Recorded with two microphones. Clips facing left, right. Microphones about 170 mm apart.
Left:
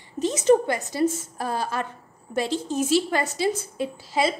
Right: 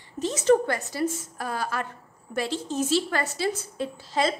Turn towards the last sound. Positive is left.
turn(degrees=10)  # may be behind; listen again after turning